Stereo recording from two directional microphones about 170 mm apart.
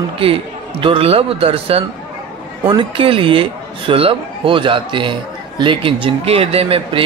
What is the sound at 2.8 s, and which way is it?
A man's voice, 30° right (ahead or behind).